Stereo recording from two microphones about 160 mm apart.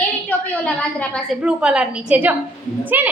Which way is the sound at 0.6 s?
5° left (ahead or behind).